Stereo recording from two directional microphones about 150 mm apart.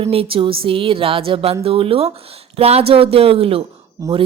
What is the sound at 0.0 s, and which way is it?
Speech, 40° right (ahead or behind).